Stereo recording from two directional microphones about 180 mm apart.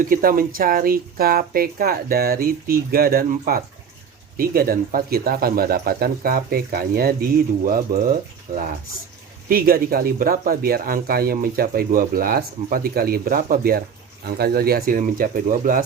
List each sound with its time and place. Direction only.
0.0 s speech: 50° right (ahead or behind)
9.5 s speech: 55° right (ahead or behind)